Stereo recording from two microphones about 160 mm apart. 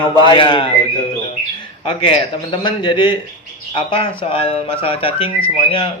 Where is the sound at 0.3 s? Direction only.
35° left (ahead or behind).